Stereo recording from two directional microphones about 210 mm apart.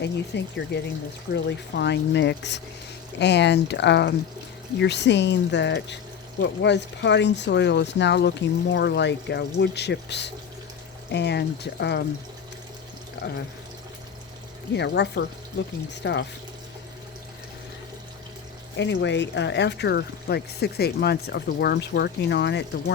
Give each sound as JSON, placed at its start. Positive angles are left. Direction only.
{"t": 0.0, "sound": "speech", "side_deg": 55}
{"t": 14.8, "sound": "speech", "side_deg": 55}
{"t": 18.8, "sound": "speech", "side_deg": 60}